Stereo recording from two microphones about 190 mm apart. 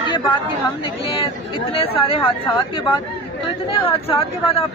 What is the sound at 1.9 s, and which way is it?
Speech, 30° left (ahead or behind).